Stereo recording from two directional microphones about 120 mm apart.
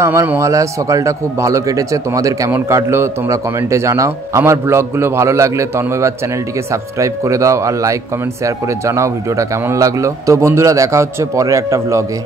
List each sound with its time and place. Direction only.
0.0 s a man's voice: 25° right (ahead or behind)